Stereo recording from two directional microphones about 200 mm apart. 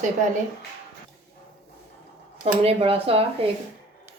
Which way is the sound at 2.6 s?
30° right (ahead or behind).